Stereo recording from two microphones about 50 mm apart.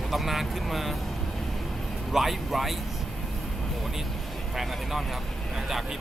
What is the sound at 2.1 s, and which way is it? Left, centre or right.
Speech, centre.